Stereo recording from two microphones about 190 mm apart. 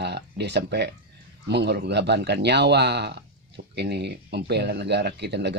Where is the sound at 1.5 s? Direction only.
65° right (ahead or behind).